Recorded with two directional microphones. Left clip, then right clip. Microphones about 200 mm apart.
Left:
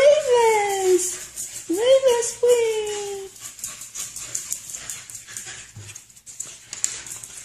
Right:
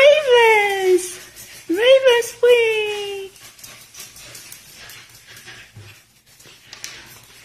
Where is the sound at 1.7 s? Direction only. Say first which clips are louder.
Right 4 dB; 10° left (ahead or behind).